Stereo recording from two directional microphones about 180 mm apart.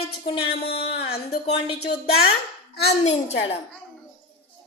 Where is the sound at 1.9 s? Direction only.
65° left (ahead or behind).